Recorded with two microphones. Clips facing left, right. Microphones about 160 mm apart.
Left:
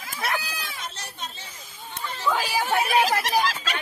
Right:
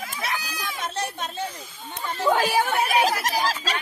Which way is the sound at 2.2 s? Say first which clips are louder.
Right 5 dB; 55° right (ahead or behind).